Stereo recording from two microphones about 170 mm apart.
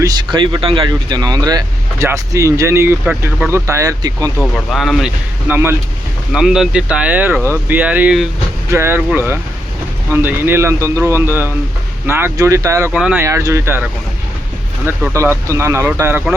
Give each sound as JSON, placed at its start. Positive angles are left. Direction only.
{"t": 0.0, "sound": "speech", "side_deg": -25}
{"t": 4.7, "sound": "speech", "side_deg": 0}
{"t": 5.5, "sound": "speech", "side_deg": -15}
{"t": 6.3, "sound": "speech", "side_deg": -5}
{"t": 14.8, "sound": "speech", "side_deg": -15}